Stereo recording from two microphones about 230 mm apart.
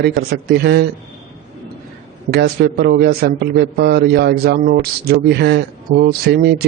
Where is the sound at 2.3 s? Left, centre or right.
Right.